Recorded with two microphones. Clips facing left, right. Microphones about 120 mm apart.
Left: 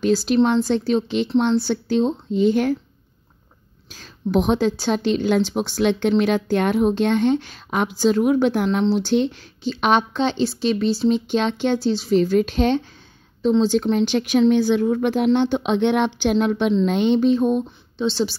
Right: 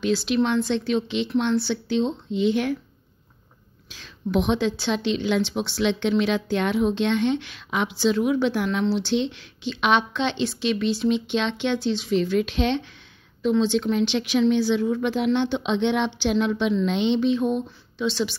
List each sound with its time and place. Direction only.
0.0 s a woman's voice: 40° left (ahead or behind)
3.9 s a woman's voice: 40° left (ahead or behind)